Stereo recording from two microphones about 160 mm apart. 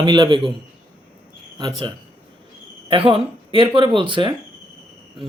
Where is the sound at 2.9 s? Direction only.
35° right (ahead or behind).